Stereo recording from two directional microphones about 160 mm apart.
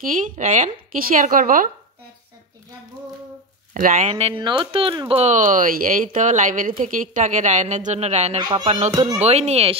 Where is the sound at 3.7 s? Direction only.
55° right (ahead or behind).